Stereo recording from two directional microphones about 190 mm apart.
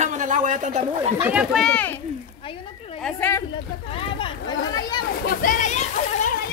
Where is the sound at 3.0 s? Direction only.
10° left (ahead or behind).